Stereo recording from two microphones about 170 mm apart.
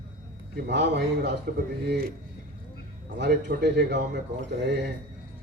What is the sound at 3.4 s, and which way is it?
Speech, 85° right.